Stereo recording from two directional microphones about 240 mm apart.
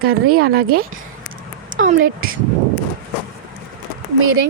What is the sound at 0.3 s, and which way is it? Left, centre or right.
Speech, right.